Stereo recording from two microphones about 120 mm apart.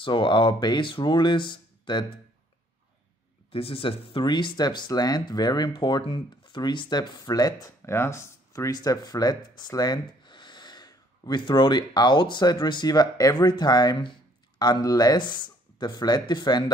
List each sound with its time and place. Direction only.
0.0 s speech: 40° left (ahead or behind)
3.5 s speech: 50° left (ahead or behind); by 16.7 s 35° left (ahead or behind)